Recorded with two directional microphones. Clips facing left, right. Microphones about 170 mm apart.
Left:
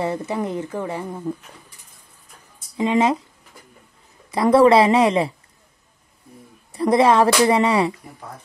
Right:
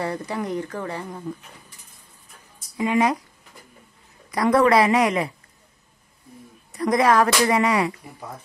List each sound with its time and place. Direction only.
0.0 s speech: 20° left (ahead or behind)
2.8 s speech: 25° left (ahead or behind)
4.3 s speech: 30° left (ahead or behind)
6.7 s speech: 30° left (ahead or behind)